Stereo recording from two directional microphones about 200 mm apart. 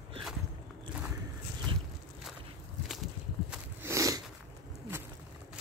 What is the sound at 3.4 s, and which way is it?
Walk, 15° right (ahead or behind).